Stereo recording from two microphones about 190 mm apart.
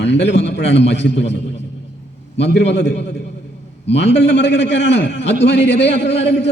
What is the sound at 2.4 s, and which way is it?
Speech, 70° left (ahead or behind).